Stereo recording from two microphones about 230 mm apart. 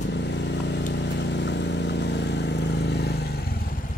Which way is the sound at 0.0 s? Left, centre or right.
Left.